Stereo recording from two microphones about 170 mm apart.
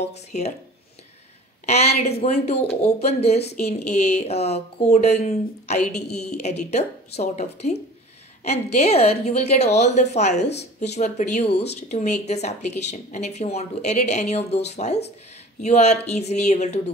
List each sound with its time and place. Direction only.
0.0 s a woman's voice: 40° left (ahead or behind)
1.7 s a woman's voice: 40° left (ahead or behind)